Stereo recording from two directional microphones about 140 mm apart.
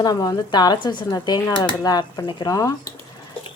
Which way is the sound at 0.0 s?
25° left (ahead or behind).